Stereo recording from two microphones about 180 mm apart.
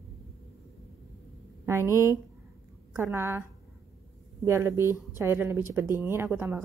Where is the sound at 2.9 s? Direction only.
15° right (ahead or behind).